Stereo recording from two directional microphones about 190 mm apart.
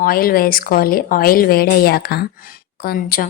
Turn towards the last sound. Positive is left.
turn(degrees=50)  # may be behind; listen again after turning